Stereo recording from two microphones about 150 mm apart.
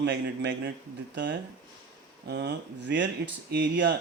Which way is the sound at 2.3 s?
90° right.